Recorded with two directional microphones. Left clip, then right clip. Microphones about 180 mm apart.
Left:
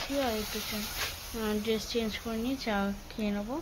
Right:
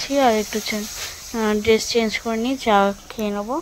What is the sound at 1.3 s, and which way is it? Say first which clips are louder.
Speech: right 15 dB; 50° right (ahead or behind).